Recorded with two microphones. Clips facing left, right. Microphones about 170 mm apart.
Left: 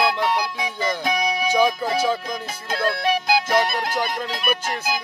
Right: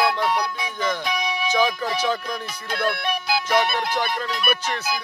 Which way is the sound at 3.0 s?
40° left (ahead or behind).